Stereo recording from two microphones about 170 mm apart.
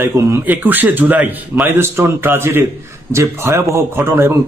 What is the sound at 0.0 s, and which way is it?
A man's voice, 15° right (ahead or behind).